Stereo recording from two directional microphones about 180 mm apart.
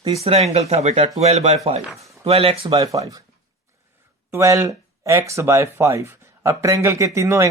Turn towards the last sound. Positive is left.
turn(degrees=-15)  # may be behind; listen again after turning